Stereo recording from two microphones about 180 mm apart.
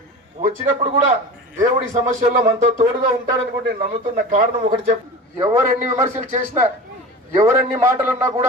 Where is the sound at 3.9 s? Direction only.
50° right (ahead or behind).